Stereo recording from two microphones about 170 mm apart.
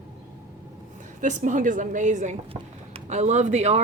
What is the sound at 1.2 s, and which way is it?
A woman's voice, 45° right (ahead or behind).